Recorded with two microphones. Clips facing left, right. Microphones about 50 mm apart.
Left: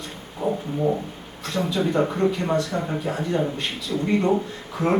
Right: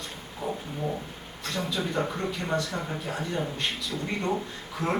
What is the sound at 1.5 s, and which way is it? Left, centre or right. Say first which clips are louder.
Speech: left 7 dB; centre.